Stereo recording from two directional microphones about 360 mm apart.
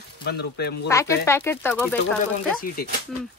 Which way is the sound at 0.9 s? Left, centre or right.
Centre.